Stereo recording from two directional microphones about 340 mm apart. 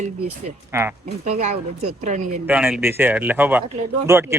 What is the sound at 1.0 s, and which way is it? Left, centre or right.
Speech, centre.